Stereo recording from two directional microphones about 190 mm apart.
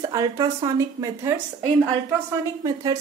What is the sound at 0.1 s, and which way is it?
A woman's voice, 20° right (ahead or behind).